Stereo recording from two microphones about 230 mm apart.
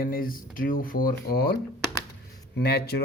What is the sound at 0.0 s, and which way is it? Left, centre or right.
Speech, left.